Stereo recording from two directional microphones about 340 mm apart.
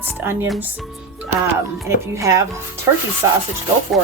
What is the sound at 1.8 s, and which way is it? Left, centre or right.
Speech, centre.